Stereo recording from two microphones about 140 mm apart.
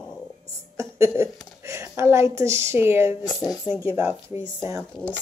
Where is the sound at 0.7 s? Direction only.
20° right (ahead or behind).